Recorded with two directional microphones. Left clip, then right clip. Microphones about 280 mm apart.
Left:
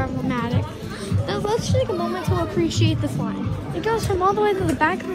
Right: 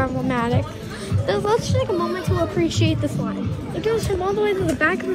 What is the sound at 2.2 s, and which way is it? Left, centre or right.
A woman's voice, centre.